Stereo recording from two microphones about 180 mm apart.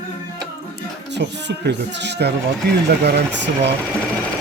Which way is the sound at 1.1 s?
70° right (ahead or behind).